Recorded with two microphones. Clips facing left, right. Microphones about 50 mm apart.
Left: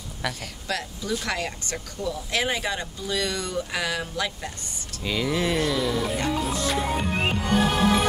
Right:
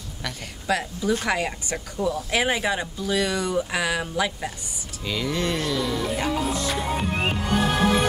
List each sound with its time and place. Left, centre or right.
0.7 s speech: centre
5.0 s music: centre